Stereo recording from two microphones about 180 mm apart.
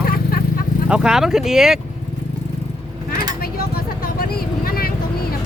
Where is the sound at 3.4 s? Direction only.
55° left (ahead or behind).